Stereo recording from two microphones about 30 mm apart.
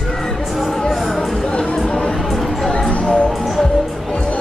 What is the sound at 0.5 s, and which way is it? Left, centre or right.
Music, centre.